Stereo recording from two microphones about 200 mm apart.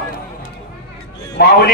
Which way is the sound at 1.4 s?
55° left (ahead or behind).